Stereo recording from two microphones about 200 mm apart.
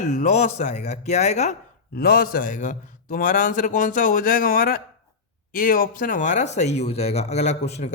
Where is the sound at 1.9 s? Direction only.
50° left (ahead or behind).